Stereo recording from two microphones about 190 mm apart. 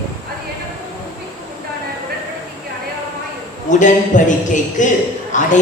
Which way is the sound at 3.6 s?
40° left (ahead or behind).